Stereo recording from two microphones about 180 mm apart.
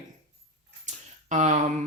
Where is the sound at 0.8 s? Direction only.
40° right (ahead or behind).